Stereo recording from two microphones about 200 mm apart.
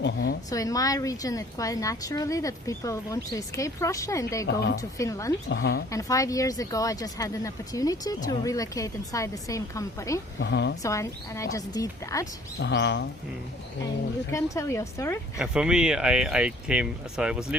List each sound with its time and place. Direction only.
0.0 s a sound: 50° left (ahead or behind)
0.5 s a woman's voice: 15° left (ahead or behind)
5.5 s speech: 60° left (ahead or behind)
5.9 s a woman's voice: 15° left (ahead or behind)
10.4 s speech: 60° left (ahead or behind)
10.8 s a woman's voice: 15° left (ahead or behind)
12.5 s speech: 60° left (ahead or behind)
14.3 s a woman's voice: 15° left (ahead or behind)
15.4 s speech: 5° right (ahead or behind)